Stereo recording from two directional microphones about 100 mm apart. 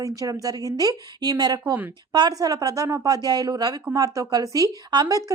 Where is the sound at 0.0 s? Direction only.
35° right (ahead or behind).